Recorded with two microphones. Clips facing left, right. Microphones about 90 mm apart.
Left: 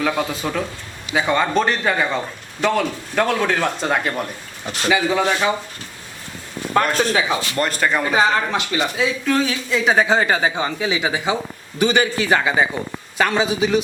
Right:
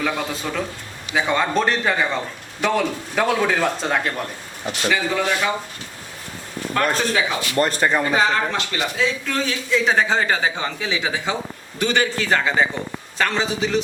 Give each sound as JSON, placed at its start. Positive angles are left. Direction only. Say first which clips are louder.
{"t": 0.0, "sound": "a man's voice", "louder": "left 3 dB", "side_deg": 5}
{"t": 4.9, "sound": "speech", "louder": "left 3 dB", "side_deg": 20}
{"t": 7.0, "sound": "speech", "louder": "left 3 dB", "side_deg": 35}
{"t": 7.8, "sound": "a man's voice", "louder": "even", "side_deg": -5}
{"t": 8.0, "sound": "speech", "louder": "left 2 dB", "side_deg": 10}